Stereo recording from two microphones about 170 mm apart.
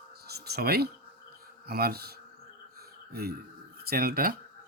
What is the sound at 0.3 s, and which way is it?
Speech, 70° right (ahead or behind).